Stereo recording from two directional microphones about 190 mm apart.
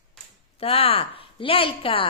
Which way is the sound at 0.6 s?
30° left (ahead or behind).